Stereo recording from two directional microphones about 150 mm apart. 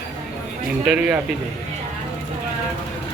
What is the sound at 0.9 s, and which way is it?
Speech, 5° right (ahead or behind).